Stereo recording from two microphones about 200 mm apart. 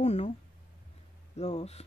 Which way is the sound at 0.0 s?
35° left (ahead or behind).